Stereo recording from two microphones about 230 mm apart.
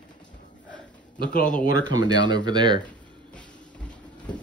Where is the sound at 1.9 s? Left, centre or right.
Centre.